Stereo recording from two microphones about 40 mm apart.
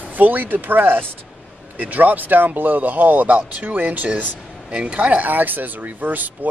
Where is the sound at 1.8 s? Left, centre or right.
Right.